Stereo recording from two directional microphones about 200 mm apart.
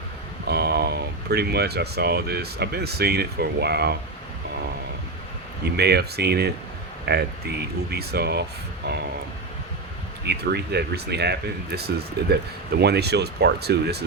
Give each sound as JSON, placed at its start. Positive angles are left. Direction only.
{"t": 0.4, "sound": "speech", "side_deg": -55}
{"t": 5.6, "sound": "speech", "side_deg": -55}
{"t": 10.2, "sound": "speech", "side_deg": -55}